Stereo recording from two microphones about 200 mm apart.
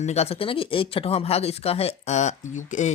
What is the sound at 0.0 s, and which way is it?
Speech, 30° left (ahead or behind).